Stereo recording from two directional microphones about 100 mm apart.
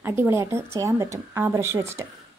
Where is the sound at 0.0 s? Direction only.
20° right (ahead or behind).